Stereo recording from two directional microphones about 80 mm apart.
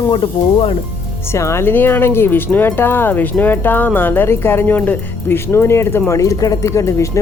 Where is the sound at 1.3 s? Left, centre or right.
Left.